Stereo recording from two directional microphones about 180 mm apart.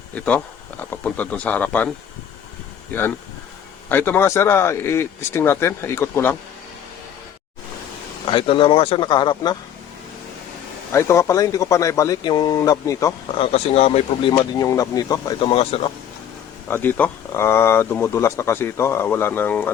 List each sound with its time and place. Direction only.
0.1 s speech: 10° left (ahead or behind)
3.8 s speech: 10° left (ahead or behind)
8.2 s speech: 30° left (ahead or behind)
10.9 s speech: 15° left (ahead or behind)
13.3 s speech: 30° left (ahead or behind)
16.6 s speech: 10° left (ahead or behind)